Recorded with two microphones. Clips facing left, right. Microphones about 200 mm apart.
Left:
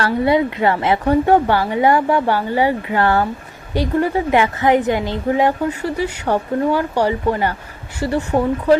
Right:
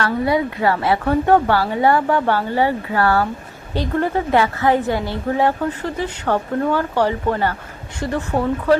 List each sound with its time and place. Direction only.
0.0 s a woman's voice: 25° left (ahead or behind)
3.8 s a woman's voice: 10° left (ahead or behind)